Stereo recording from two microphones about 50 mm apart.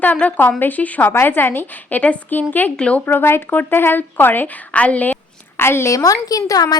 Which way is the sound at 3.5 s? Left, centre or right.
Left.